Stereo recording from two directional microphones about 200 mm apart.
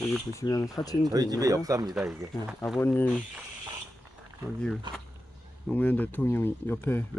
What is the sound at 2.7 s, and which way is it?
Speech, 10° left (ahead or behind).